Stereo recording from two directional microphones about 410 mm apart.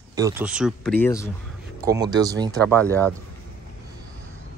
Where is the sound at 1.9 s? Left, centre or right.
Centre.